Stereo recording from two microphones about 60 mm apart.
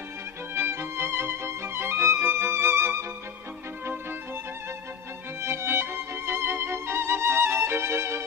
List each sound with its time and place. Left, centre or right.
0.6 s music: right
5.4 s music: right